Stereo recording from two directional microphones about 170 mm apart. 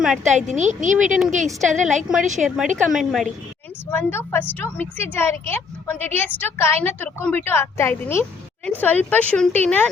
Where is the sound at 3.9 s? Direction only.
15° left (ahead or behind).